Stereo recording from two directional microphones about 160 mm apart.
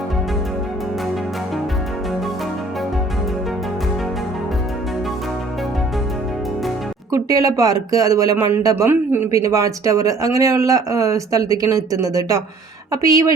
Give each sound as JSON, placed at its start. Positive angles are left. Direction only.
{"t": 7.1, "sound": "speech", "side_deg": -20}